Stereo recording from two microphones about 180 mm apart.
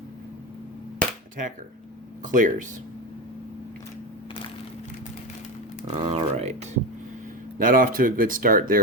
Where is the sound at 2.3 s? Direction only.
45° right (ahead or behind).